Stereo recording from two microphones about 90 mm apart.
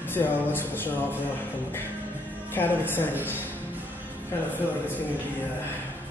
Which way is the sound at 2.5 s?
25° left (ahead or behind).